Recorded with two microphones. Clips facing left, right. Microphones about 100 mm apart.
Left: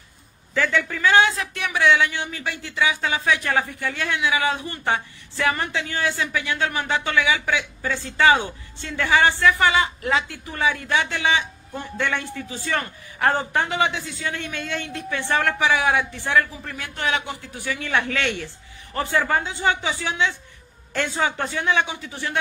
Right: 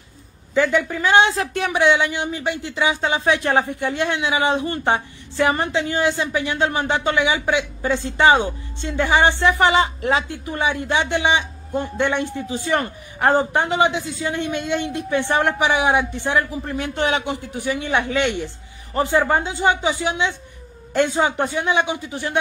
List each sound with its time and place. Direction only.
0.6 s speech: 15° right (ahead or behind)
1.3 s speech: 30° right (ahead or behind)